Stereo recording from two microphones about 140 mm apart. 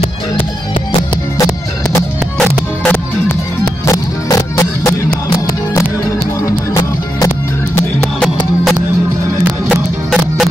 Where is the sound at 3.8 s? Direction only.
20° left (ahead or behind).